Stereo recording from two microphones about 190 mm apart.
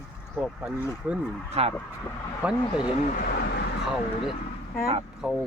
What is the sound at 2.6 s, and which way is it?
Speech, 20° left (ahead or behind).